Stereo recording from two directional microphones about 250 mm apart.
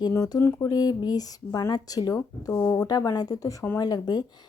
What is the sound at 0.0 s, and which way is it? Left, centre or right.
Speech, centre.